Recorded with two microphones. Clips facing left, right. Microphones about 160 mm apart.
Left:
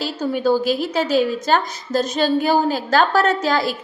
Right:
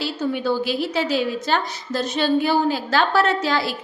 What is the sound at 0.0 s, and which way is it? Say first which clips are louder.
A woman's voice: left 3 dB; 40° left (ahead or behind).